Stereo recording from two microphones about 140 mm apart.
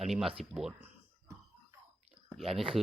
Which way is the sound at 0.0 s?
Centre (ahead or behind).